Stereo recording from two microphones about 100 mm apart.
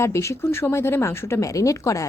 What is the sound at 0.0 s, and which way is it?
A woman's voice, 30° left (ahead or behind).